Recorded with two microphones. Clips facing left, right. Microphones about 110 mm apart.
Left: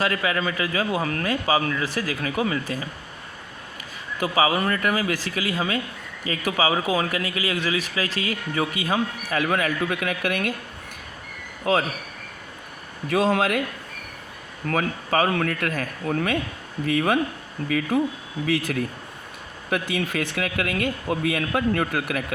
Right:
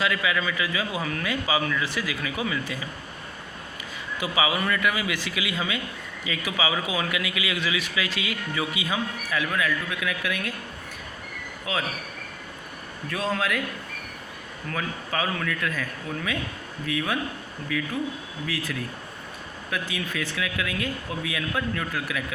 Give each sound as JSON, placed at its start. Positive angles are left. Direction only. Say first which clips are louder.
{"t": 0.0, "sound": "speech", "louder": "left 2 dB", "side_deg": 45}
{"t": 4.2, "sound": "speech", "louder": "left 4 dB", "side_deg": 45}
{"t": 11.6, "sound": "speech", "louder": "left 8 dB", "side_deg": 65}
{"t": 13.1, "sound": "speech", "louder": "left 6 dB", "side_deg": 75}
{"t": 14.7, "sound": "speech", "louder": "left 7 dB", "side_deg": 65}